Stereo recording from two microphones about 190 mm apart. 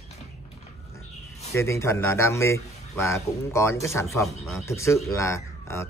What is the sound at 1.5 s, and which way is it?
A man's voice, 15° left (ahead or behind).